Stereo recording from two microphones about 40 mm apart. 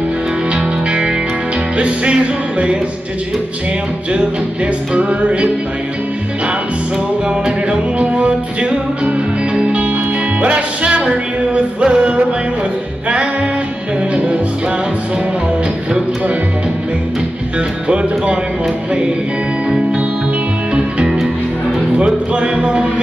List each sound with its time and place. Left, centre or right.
1.8 s music: right
4.9 s music: right
8.0 s music: right
10.4 s music: right
17.8 s music: right
20.7 s music: right